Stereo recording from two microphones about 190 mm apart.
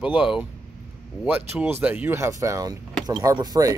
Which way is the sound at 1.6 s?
10° right (ahead or behind).